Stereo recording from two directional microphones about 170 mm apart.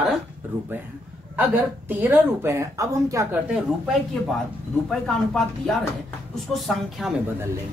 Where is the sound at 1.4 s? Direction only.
10° right (ahead or behind).